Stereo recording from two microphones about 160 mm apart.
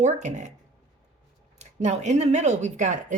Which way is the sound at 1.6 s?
45° right (ahead or behind).